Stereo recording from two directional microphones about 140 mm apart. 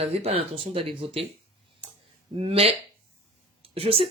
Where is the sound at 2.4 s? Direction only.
45° right (ahead or behind).